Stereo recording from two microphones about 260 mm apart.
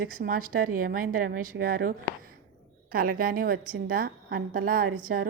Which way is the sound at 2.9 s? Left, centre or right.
Right.